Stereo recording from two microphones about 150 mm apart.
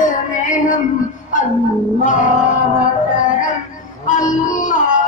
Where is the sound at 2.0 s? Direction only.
55° left (ahead or behind).